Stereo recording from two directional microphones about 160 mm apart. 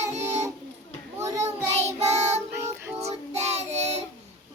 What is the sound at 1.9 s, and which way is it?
Child singing, 40° right (ahead or behind).